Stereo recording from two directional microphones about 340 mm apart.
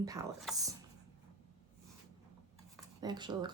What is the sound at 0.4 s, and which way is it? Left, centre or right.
Speech, centre.